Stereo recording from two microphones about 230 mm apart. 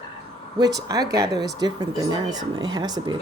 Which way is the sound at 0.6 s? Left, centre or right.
Centre.